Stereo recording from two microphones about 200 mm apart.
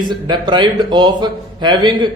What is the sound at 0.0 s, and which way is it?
A man's voice, 20° right (ahead or behind).